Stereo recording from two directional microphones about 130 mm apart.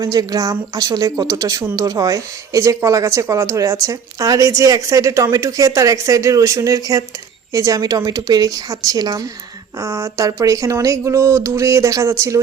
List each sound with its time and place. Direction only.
0.0 s speech: 30° right (ahead or behind)